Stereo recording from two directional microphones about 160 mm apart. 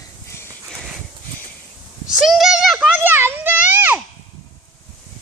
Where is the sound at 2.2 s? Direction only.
Centre (ahead or behind).